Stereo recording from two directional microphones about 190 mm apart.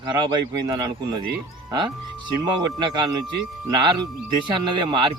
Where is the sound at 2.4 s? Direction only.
25° right (ahead or behind).